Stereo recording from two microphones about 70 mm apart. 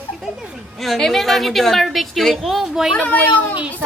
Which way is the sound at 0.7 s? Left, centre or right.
Centre.